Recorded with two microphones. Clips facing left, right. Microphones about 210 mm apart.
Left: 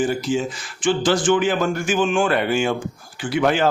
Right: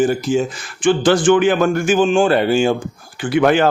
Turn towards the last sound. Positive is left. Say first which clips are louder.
# right 5 dB
turn(degrees=-60)  # may be behind; listen again after turning